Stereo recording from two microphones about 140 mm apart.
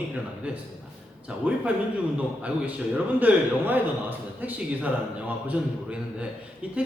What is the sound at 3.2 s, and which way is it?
Speech, 15° right (ahead or behind).